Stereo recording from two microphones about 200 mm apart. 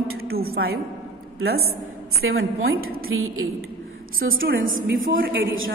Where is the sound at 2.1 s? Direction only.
90° right.